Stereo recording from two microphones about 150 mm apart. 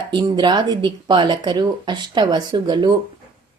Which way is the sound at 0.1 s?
30° right (ahead or behind).